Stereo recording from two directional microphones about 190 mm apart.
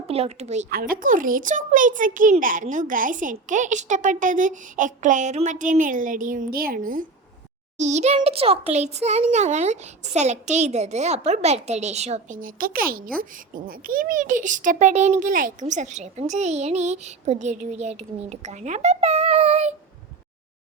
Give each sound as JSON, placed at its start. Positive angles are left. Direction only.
{"t": 0.1, "sound": "speech", "side_deg": -35}
{"t": 0.7, "sound": "a child's voice", "side_deg": -50}
{"t": 7.8, "sound": "speech", "side_deg": -35}